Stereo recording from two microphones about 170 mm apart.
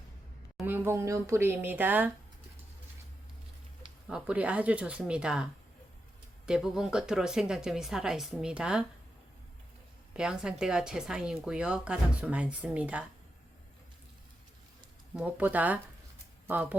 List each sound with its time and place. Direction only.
0.6 s speech: 10° right (ahead or behind)
4.1 s speech: 5° right (ahead or behind)
10.2 s speech: 5° right (ahead or behind)
15.1 s speech: 10° right (ahead or behind)